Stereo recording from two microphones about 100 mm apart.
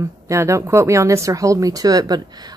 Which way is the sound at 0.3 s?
30° right (ahead or behind).